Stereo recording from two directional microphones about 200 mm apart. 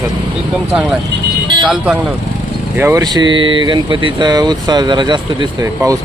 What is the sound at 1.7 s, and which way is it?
Speech, 5° right (ahead or behind).